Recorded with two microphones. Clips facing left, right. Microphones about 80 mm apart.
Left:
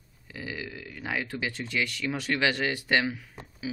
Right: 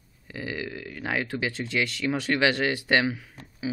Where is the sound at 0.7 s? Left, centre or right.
Centre.